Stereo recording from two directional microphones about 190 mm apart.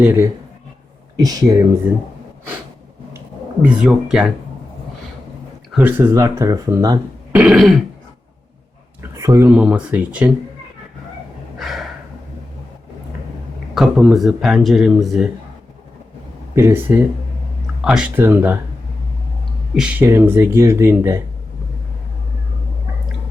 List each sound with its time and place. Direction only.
0.0 s speech: 10° right (ahead or behind)
3.6 s speech: 5° right (ahead or behind)
5.7 s speech: 10° right (ahead or behind)
7.3 s speech: 5° right (ahead or behind)
9.0 s a sound: 15° right (ahead or behind)
9.5 s speech: 5° right (ahead or behind)
11.6 s a sound: centre (ahead or behind)
13.7 s speech: centre (ahead or behind)
16.6 s speech: 10° right (ahead or behind)
19.7 s speech: 5° right (ahead or behind)